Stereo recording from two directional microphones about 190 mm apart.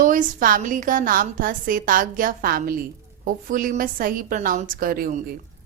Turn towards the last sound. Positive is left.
turn(degrees=-50)  # may be behind; listen again after turning